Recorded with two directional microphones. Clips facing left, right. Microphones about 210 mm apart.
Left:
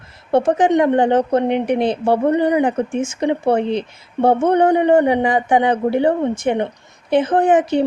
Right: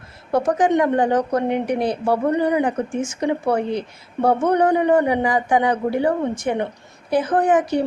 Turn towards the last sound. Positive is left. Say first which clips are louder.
# left 3 dB
turn(degrees=25)  # may be behind; listen again after turning